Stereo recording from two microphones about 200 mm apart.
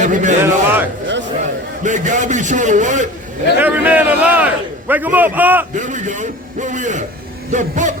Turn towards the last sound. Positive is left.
turn(degrees=-40)  # may be behind; listen again after turning